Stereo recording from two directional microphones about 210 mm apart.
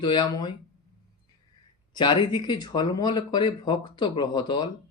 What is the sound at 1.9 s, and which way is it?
Speech, 20° left (ahead or behind).